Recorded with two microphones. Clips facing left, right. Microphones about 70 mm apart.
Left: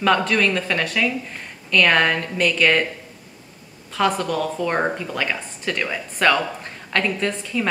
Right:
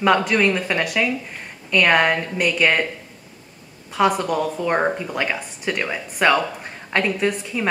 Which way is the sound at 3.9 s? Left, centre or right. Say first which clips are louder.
Right 2 dB; centre.